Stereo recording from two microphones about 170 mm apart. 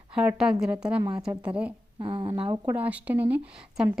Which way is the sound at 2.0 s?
30° right (ahead or behind).